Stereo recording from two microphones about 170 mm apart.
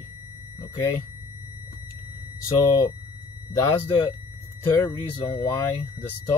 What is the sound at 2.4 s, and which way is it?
Speech, 20° left (ahead or behind).